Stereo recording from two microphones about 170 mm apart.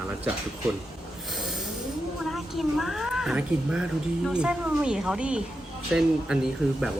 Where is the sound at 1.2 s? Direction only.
Centre (ahead or behind).